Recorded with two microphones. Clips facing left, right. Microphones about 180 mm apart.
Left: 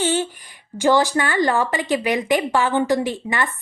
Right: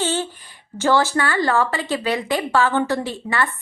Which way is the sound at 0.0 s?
15° left (ahead or behind).